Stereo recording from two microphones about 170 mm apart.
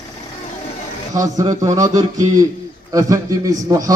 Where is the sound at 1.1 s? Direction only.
20° right (ahead or behind).